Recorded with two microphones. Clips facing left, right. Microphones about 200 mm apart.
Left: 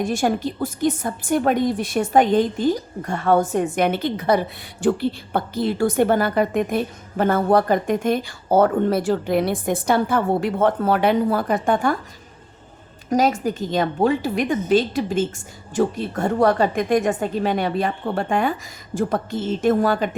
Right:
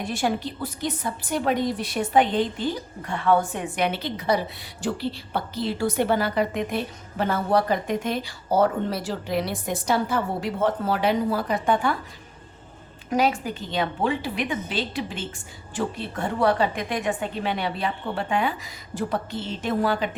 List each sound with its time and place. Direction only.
0.0 s a woman's voice: 45° left (ahead or behind)
13.1 s a woman's voice: 40° left (ahead or behind)